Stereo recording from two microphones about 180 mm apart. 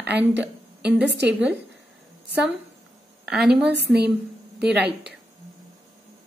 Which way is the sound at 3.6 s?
65° right (ahead or behind).